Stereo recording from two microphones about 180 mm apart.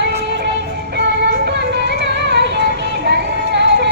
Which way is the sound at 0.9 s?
65° right (ahead or behind).